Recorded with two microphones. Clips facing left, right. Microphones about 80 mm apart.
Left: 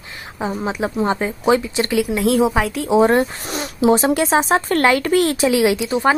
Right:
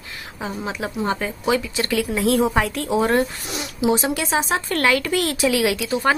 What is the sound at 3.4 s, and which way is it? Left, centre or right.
Speech, left.